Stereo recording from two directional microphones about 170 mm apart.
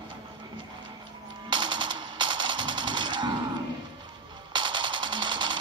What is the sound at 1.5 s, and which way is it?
Machine gun, 25° right (ahead or behind).